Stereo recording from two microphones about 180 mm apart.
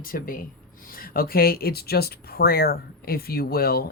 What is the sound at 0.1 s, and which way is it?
Speech, 55° left (ahead or behind).